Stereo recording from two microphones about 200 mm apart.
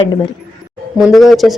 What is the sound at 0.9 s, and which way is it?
Speech, centre (ahead or behind).